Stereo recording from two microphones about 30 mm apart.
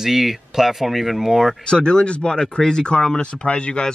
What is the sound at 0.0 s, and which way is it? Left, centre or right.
A man's voice, centre.